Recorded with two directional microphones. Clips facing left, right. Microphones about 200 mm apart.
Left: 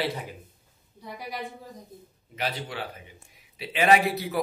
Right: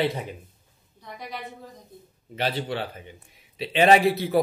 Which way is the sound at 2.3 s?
30° right (ahead or behind).